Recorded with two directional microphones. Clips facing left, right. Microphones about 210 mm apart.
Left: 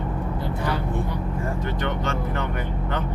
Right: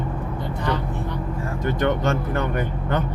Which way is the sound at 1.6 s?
45° right (ahead or behind).